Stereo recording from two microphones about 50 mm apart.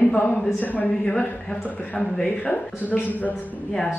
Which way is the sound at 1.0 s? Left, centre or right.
Left.